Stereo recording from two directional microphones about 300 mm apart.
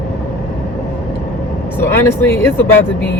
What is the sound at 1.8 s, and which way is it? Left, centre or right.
Speech, centre.